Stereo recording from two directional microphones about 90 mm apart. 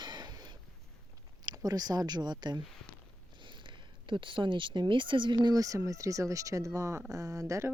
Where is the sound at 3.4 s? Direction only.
65° right (ahead or behind); by 7.7 s 35° right (ahead or behind).